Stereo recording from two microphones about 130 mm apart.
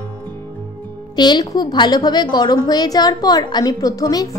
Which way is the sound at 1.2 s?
35° left (ahead or behind).